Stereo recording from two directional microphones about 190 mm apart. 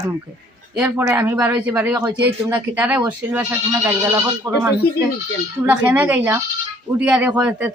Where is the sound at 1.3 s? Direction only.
5° right (ahead or behind).